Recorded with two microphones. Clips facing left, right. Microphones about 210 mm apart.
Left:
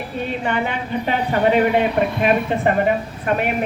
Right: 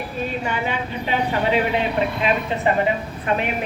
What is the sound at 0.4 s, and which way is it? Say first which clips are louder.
A woman's voice: left 2 dB; 55° left (ahead or behind).